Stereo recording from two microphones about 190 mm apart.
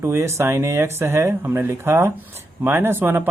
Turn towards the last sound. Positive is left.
turn(degrees=-10)  # may be behind; listen again after turning